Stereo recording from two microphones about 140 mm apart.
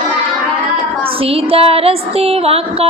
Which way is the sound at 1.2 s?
40° right (ahead or behind).